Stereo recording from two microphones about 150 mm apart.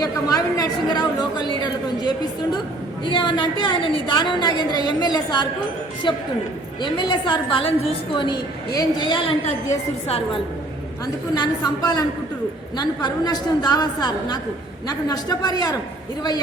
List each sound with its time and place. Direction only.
0.0 s chatter: 25° left (ahead or behind)
1.6 s a sound: 30° left (ahead or behind)
3.0 s a woman's voice: 30° left (ahead or behind)
11.0 s a woman's voice: 25° left (ahead or behind)